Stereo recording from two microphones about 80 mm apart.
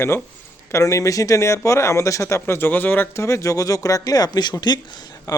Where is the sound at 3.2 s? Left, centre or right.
Left.